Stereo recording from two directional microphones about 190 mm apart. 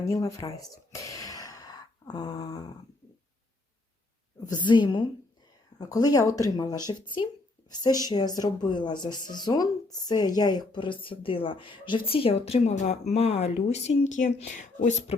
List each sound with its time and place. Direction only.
0.0 s gasp: 15° left (ahead or behind)
4.4 s speech: 25° left (ahead or behind); by 15.1 s 40° left (ahead or behind)